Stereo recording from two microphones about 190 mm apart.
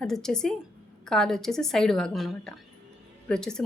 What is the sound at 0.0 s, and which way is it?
Speech, 5° left (ahead or behind).